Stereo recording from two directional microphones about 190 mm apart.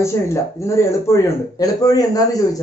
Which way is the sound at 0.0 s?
15° left (ahead or behind).